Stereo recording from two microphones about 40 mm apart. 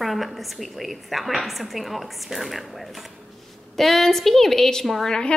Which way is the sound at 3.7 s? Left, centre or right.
Centre.